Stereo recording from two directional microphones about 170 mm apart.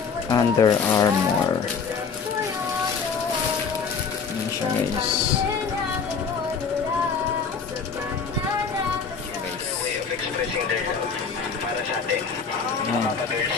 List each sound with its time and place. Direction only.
0.3 s speech: 20° left (ahead or behind)